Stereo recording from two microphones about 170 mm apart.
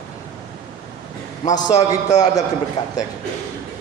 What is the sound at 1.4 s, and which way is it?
Speech, 25° left (ahead or behind).